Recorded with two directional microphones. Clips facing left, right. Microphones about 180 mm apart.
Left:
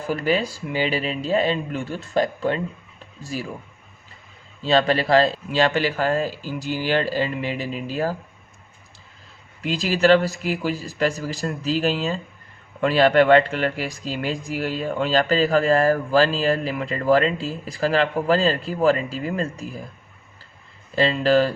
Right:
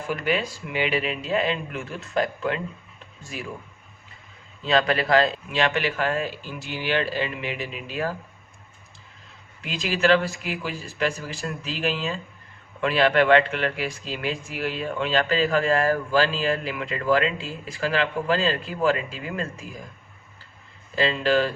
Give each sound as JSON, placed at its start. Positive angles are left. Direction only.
{"t": 0.1, "sound": "speech", "side_deg": 35}
{"t": 4.6, "sound": "speech", "side_deg": 30}
{"t": 9.6, "sound": "speech", "side_deg": 35}
{"t": 20.9, "sound": "speech", "side_deg": 35}